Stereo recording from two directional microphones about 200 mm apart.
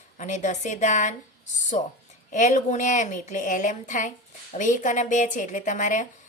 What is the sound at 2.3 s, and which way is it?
A woman's voice, 40° left (ahead or behind).